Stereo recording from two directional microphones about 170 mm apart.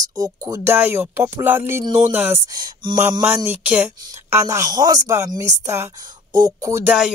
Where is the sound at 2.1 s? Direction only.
10° right (ahead or behind).